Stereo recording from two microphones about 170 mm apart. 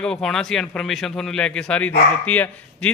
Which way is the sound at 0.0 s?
5° left (ahead or behind).